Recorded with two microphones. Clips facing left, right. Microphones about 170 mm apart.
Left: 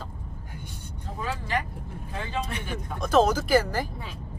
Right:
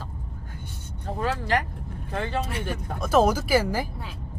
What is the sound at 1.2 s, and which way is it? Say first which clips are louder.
Speech: right 4 dB; 75° right (ahead or behind).